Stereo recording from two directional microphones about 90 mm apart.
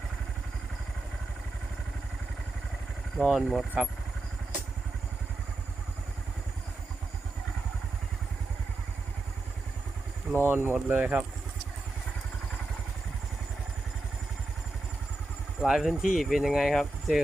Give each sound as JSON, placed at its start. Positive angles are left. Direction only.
{"t": 3.2, "sound": "speech", "side_deg": -5}
{"t": 10.3, "sound": "speech", "side_deg": -25}
{"t": 15.6, "sound": "speech", "side_deg": -5}